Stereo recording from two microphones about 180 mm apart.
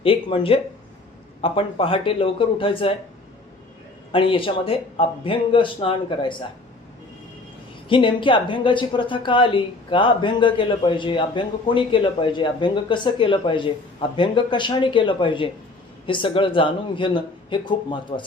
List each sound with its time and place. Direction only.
0.0 s speech: 30° left (ahead or behind)
4.1 s speech: 30° left (ahead or behind)
7.9 s speech: 25° left (ahead or behind)